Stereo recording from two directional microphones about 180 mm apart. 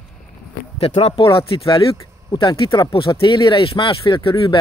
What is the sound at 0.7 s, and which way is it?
Speech, 35° left (ahead or behind).